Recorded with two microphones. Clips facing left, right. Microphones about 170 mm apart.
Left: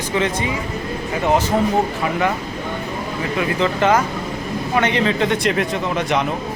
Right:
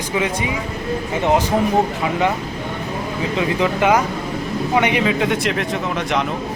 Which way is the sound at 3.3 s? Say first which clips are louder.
Even; 15° right (ahead or behind).